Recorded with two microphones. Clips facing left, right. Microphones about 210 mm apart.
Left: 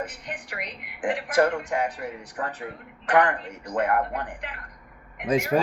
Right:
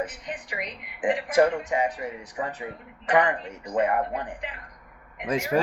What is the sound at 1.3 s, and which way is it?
Speech, 5° right (ahead or behind).